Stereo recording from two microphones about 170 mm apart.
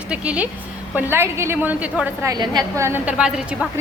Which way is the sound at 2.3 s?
20° right (ahead or behind).